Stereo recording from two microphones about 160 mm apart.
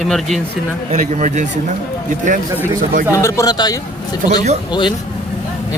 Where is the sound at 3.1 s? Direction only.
20° left (ahead or behind).